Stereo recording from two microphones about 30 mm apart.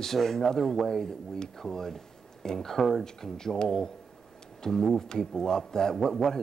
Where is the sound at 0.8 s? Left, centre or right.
Centre.